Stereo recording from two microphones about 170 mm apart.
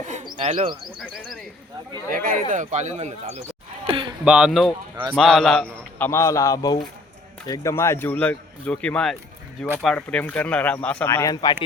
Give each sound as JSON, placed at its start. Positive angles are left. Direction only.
{"t": 0.3, "sound": "speech", "side_deg": -35}
{"t": 2.0, "sound": "speech", "side_deg": -55}
{"t": 3.8, "sound": "a sound", "side_deg": -30}
{"t": 4.3, "sound": "speech", "side_deg": -5}